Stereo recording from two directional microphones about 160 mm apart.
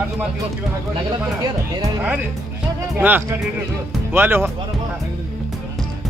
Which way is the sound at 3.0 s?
10° right (ahead or behind).